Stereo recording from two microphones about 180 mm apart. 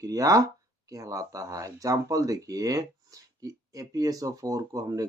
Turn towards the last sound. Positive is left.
turn(degrees=-20)  # may be behind; listen again after turning